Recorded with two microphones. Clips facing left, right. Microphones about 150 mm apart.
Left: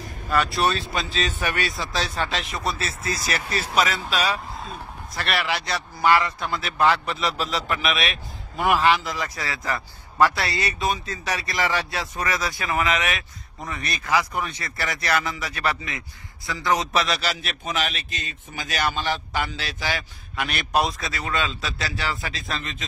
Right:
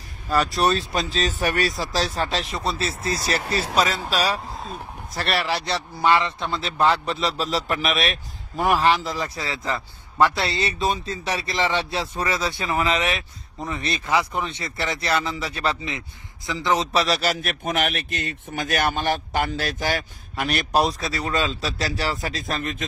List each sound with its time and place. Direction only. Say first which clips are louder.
0.6 s a man's voice: right 2 dB; 40° right (ahead or behind)
5.1 s a man's voice: right 2 dB; 35° right (ahead or behind)
5.9 s a man's voice: even; 25° right (ahead or behind); by 22.8 s 50° right (ahead or behind)